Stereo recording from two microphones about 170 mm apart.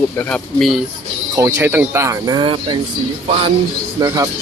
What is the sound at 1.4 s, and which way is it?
Speech, 15° right (ahead or behind).